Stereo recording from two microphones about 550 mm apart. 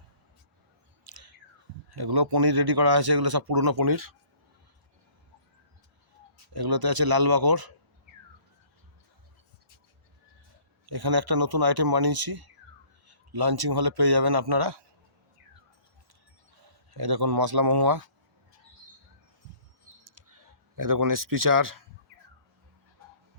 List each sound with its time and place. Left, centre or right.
1.0 s a sound: right
1.9 s speech: right
6.5 s speech: right
10.8 s speech: right
16.6 s a man's voice: right
20.1 s a sound: right